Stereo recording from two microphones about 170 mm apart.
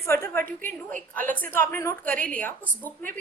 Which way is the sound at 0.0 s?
15° left (ahead or behind).